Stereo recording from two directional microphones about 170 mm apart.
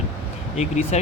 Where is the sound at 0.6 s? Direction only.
40° left (ahead or behind).